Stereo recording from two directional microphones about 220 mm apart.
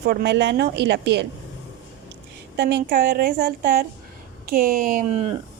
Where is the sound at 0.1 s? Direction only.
50° right (ahead or behind).